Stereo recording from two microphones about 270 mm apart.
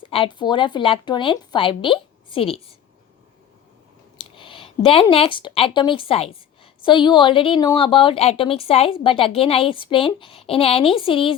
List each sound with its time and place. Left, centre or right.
0.0 s a woman's voice: centre
4.2 s a woman's voice: centre